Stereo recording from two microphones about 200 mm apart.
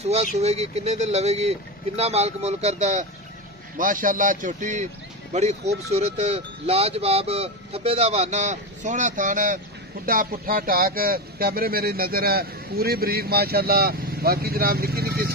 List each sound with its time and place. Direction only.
0.0 s speech: 35° right (ahead or behind); by 15.3 s 50° right (ahead or behind)